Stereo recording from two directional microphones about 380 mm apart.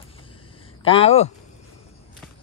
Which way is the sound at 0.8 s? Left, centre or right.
Centre.